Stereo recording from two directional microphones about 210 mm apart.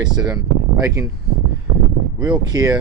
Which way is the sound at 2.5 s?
20° right (ahead or behind).